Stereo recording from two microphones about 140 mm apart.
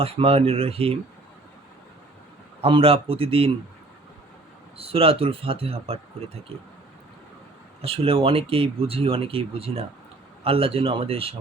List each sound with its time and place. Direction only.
0.0 s speech: 45° right (ahead or behind)
2.6 s speech: 40° right (ahead or behind)
4.8 s speech: 45° right (ahead or behind)
7.8 s speech: 40° right (ahead or behind)